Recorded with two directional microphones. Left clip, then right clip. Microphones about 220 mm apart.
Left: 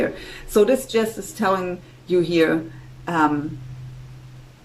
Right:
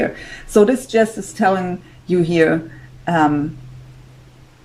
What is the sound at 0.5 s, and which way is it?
Speech, 25° right (ahead or behind).